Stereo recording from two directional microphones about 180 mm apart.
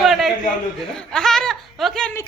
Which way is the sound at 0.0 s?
Centre (ahead or behind).